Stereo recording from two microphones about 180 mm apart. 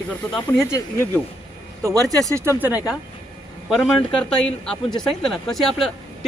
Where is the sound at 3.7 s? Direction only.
Centre (ahead or behind).